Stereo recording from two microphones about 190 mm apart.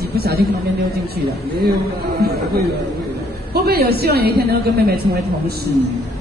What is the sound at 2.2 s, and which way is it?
Speech, 55° right (ahead or behind).